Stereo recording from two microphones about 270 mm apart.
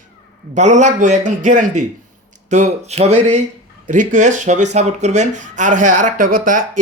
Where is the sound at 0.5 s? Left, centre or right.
Right.